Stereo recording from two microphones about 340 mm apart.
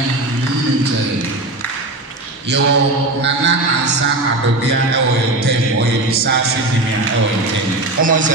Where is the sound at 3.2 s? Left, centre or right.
Right.